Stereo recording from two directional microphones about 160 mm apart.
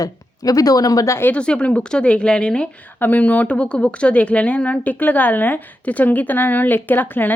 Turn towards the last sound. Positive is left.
turn(degrees=10)  # may be behind; listen again after turning